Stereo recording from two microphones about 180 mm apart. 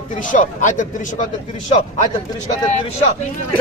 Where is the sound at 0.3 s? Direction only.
45° left (ahead or behind).